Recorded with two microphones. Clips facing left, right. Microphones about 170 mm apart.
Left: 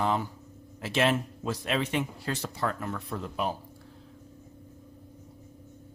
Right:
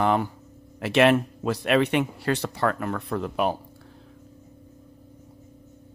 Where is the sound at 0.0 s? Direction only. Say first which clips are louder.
Right 6 dB; 65° right (ahead or behind).